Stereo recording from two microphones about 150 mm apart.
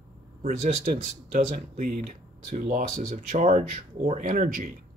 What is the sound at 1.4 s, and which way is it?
Speech, 60° right (ahead or behind).